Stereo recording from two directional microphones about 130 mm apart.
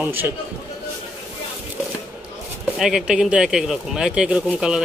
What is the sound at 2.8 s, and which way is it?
Speech, 5° right (ahead or behind).